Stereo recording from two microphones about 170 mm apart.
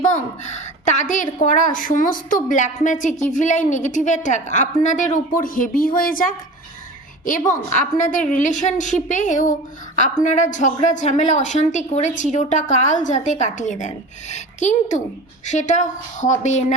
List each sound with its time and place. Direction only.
0.1 s a woman's voice: 45° left (ahead or behind)